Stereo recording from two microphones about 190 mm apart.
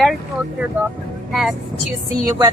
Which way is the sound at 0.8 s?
10° right (ahead or behind).